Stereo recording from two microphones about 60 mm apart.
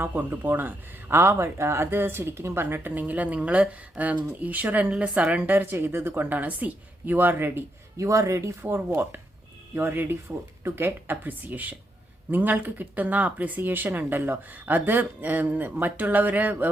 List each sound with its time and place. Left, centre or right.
0.0 s speech: right
5.7 s speech: right
7.9 s speech: right
8.7 s speech: right